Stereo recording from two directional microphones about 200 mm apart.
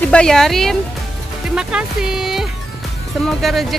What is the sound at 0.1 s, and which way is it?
Speech, 5° left (ahead or behind).